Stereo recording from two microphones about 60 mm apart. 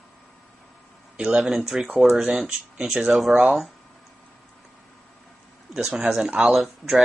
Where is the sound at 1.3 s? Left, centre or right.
Centre.